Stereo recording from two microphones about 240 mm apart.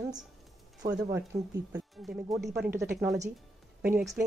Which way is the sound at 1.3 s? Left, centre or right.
Centre.